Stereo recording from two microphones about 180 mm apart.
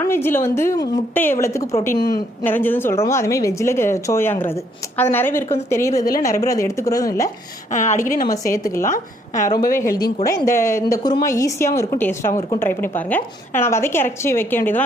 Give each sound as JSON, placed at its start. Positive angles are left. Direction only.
{"t": 0.0, "sound": "a woman's voice", "side_deg": 15}
{"t": 7.7, "sound": "a woman's voice", "side_deg": 45}
{"t": 8.3, "sound": "a woman's voice", "side_deg": 20}